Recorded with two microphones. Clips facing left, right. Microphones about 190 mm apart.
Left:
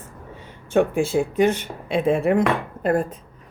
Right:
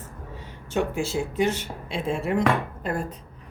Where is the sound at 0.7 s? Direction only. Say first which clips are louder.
Left 7 dB; 55° left (ahead or behind).